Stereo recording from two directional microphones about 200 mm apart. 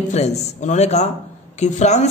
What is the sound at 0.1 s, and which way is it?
A man's voice, 35° left (ahead or behind).